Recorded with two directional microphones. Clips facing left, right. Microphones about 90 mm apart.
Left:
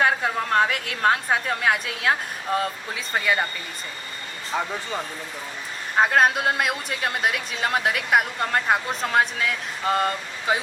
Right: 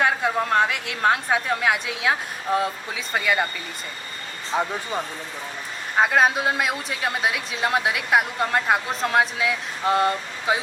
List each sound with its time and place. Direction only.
0.0 s a man's voice: 5° right (ahead or behind)
4.5 s speech: 20° right (ahead or behind)
6.0 s a man's voice: centre (ahead or behind)